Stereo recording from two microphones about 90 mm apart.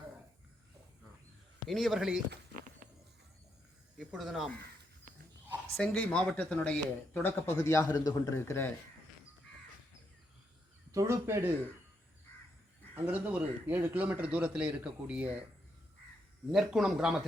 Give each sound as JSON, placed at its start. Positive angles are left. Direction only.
{"t": 1.6, "sound": "a man's voice", "side_deg": 0}
{"t": 4.1, "sound": "a man's voice", "side_deg": 0}
{"t": 5.7, "sound": "speech", "side_deg": 10}
{"t": 7.6, "sound": "speech", "side_deg": 35}
{"t": 10.9, "sound": "speech", "side_deg": -30}
{"t": 13.1, "sound": "a man's voice", "side_deg": -15}
{"t": 16.5, "sound": "a man's voice", "side_deg": -5}